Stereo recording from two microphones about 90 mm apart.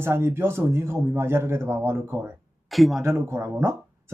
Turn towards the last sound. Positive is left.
turn(degrees=-30)  # may be behind; listen again after turning